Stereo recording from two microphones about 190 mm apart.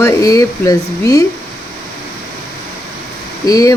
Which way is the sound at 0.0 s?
20° left (ahead or behind).